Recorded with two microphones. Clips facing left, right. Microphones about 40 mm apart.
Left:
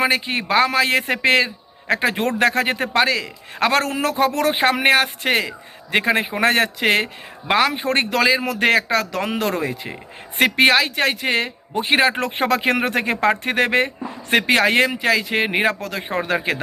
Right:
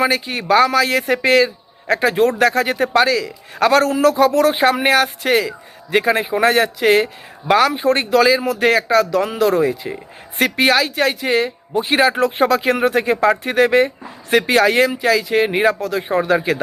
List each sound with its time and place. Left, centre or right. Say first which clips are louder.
0.0 s a man's voice: right 1 dB; left
1.5 s a sound: right 2 dB; left
2.0 s a man's voice: right 5 dB; left